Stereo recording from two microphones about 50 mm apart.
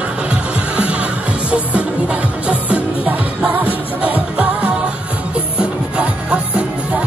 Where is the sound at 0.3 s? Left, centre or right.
Right.